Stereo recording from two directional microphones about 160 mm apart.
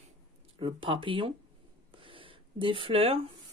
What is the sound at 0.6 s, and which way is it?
Speech, 30° right (ahead or behind).